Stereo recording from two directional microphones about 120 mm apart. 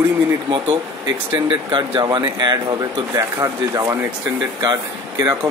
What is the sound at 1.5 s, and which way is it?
Speech, 40° right (ahead or behind).